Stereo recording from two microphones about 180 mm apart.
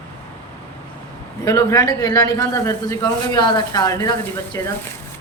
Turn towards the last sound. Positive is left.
turn(degrees=15)  # may be behind; listen again after turning